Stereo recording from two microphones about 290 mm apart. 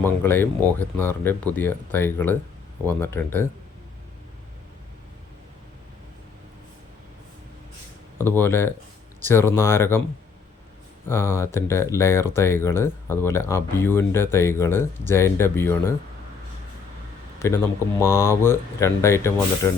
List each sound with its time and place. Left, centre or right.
0.0 s speech: centre
8.2 s speech: centre
11.1 s speech: centre
18.0 s speech: centre